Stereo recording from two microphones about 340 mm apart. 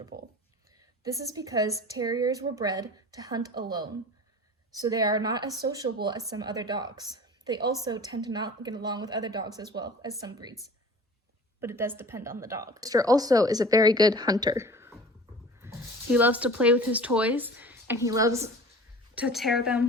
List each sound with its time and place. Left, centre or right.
0.1 s speech: right
1.0 s speech: centre
4.8 s speech: centre
11.6 s speech: centre
15.6 s a sound: centre
16.1 s speech: centre